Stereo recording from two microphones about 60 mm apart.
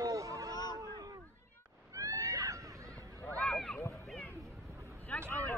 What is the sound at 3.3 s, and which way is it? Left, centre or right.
Run, centre.